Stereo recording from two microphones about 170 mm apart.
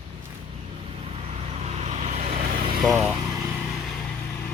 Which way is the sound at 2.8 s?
Centre (ahead or behind).